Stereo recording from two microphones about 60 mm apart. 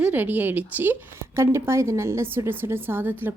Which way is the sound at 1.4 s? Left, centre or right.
Right.